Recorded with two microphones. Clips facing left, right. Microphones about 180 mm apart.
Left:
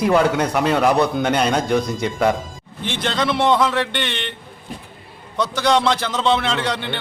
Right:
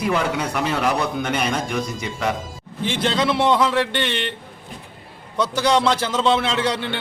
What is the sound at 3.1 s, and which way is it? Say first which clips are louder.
A man's voice: left 1 dB; 10° right (ahead or behind).